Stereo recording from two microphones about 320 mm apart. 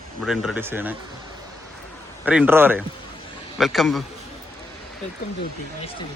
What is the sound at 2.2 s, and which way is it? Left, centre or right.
Speech, centre.